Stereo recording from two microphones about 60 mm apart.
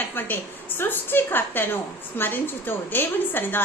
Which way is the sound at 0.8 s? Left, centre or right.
Left.